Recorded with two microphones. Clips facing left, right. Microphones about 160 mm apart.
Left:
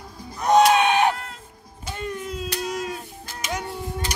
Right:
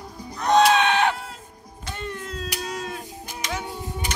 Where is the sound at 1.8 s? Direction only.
10° left (ahead or behind).